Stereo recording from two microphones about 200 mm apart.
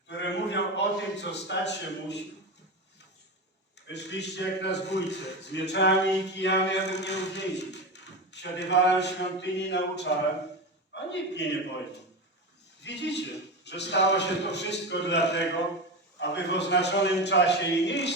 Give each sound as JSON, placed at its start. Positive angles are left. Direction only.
{"t": 0.1, "sound": "a sound", "side_deg": 60}
{"t": 3.8, "sound": "a man's voice", "side_deg": 60}
{"t": 11.1, "sound": "a man's voice", "side_deg": 60}
{"t": 12.8, "sound": "a man's voice", "side_deg": 60}